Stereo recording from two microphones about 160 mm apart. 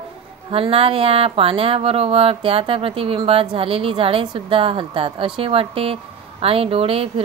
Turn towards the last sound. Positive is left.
turn(degrees=-35)  # may be behind; listen again after turning